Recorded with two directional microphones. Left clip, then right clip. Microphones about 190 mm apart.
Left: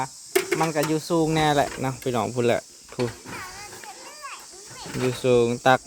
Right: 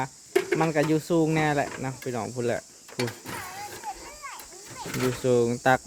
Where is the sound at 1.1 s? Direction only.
15° left (ahead or behind).